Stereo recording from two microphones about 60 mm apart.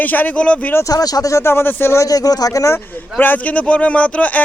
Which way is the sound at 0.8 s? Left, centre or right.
Left.